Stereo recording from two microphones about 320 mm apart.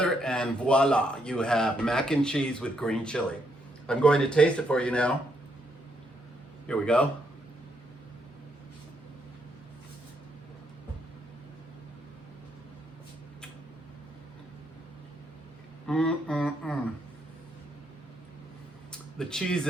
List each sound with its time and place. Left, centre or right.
0.0 s speech: centre
6.7 s speech: centre
15.9 s speech: centre
18.9 s a sound: centre